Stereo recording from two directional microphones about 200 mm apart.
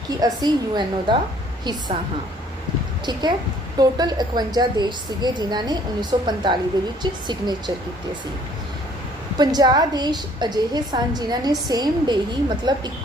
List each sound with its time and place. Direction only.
0.2 s a woman's voice: 20° right (ahead or behind)
3.1 s a woman's voice: 20° right (ahead or behind)
9.4 s a woman's voice: 20° right (ahead or behind)